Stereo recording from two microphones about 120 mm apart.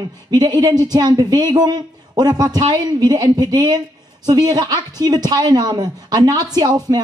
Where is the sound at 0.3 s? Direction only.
35° right (ahead or behind).